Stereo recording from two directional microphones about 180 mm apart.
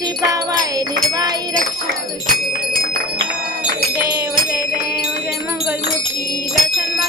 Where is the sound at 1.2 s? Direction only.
20° right (ahead or behind).